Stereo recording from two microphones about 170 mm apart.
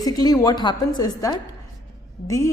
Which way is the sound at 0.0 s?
20° left (ahead or behind).